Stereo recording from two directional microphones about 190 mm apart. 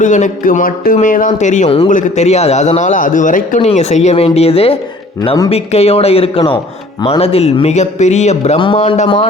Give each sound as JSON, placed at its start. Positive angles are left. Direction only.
{"t": 0.0, "sound": "a man's voice", "side_deg": 40}